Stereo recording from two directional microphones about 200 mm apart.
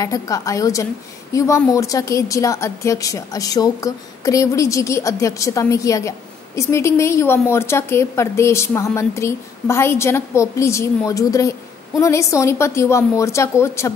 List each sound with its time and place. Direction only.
0.0 s a woman's voice: 15° left (ahead or behind)